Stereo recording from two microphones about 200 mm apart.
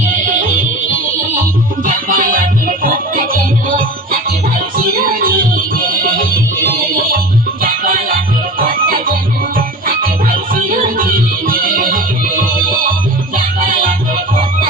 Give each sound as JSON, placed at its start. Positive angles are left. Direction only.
{"t": 0.1, "sound": "music", "side_deg": -40}
{"t": 1.8, "sound": "music", "side_deg": -45}